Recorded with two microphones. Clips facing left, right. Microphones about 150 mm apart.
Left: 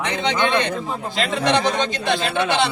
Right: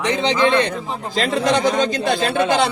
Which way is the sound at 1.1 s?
40° right (ahead or behind).